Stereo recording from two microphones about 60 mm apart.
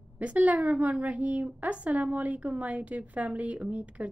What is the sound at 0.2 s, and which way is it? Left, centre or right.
A woman's voice, right.